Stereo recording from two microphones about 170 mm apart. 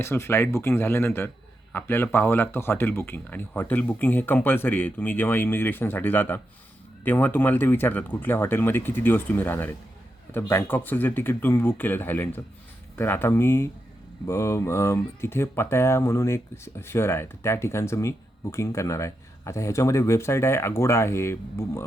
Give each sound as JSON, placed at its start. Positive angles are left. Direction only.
{"t": 0.0, "sound": "speech", "side_deg": 15}